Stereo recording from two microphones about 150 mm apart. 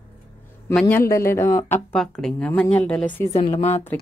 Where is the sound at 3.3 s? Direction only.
45° left (ahead or behind).